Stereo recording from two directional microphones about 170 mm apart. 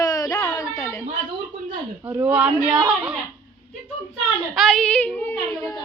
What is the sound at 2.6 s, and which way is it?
Speech, 25° right (ahead or behind).